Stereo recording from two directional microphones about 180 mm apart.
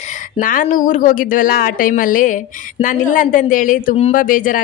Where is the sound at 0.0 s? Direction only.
45° left (ahead or behind).